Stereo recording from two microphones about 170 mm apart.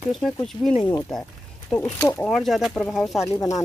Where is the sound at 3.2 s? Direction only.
20° left (ahead or behind).